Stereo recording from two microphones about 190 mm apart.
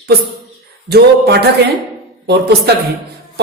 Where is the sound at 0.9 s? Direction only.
60° right (ahead or behind).